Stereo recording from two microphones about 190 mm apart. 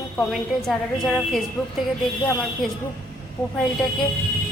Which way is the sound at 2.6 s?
Centre (ahead or behind).